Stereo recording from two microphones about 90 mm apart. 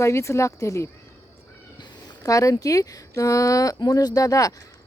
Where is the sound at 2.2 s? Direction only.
40° left (ahead or behind).